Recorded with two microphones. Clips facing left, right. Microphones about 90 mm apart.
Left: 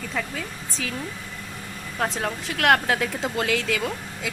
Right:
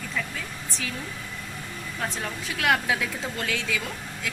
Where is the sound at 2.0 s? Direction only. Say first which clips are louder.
Left 6 dB; 65° left (ahead or behind).